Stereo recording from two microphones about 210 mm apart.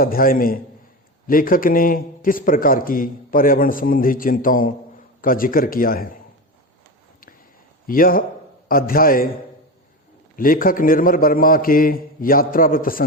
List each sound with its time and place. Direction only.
0.0 s a man's voice: 45° left (ahead or behind)
7.9 s a man's voice: 40° left (ahead or behind)
10.3 s a man's voice: 45° left (ahead or behind)